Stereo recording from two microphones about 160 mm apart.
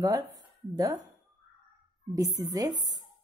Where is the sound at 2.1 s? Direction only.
20° right (ahead or behind).